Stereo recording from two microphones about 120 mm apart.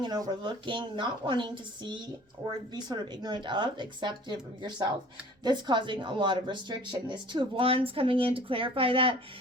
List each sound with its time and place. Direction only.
0.0 s speech: 35° right (ahead or behind)